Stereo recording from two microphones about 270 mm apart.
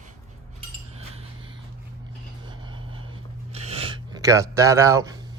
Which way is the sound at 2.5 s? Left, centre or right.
Centre.